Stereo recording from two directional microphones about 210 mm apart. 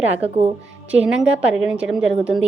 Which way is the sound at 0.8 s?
5° right (ahead or behind).